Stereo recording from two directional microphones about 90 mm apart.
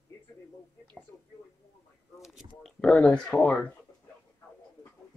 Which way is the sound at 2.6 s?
Centre (ahead or behind).